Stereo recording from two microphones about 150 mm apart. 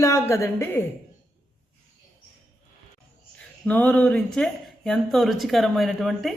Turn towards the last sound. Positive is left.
turn(degrees=0)  # may be behind; listen again after turning